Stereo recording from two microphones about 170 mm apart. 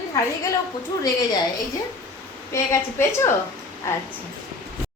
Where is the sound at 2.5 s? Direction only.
15° left (ahead or behind).